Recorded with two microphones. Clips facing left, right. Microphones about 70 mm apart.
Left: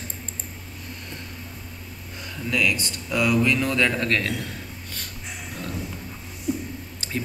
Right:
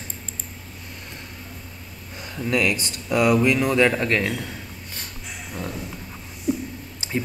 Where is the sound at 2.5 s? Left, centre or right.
Right.